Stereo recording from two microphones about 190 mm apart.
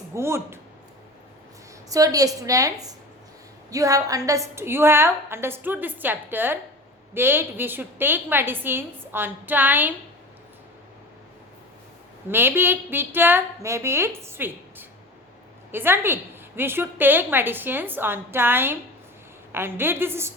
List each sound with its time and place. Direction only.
0.1 s a woman's voice: 15° right (ahead or behind)
1.9 s a woman's voice: 20° right (ahead or behind)
12.3 s a woman's voice: 10° right (ahead or behind)